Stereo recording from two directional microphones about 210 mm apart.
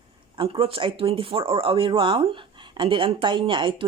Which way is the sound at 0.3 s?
25° right (ahead or behind).